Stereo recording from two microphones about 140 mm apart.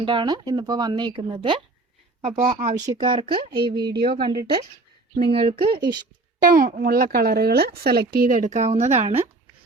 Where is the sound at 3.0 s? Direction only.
35° right (ahead or behind).